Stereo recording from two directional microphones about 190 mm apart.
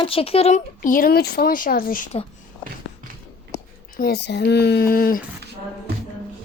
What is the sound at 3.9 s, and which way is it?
Speech, 55° left (ahead or behind).